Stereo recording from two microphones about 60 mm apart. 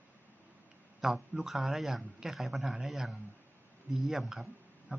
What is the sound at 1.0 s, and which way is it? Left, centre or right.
A man's voice, centre.